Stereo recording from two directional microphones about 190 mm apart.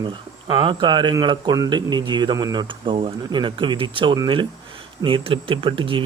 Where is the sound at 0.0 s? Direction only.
20° right (ahead or behind).